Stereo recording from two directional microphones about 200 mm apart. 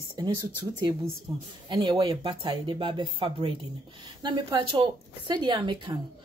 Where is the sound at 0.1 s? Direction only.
15° right (ahead or behind).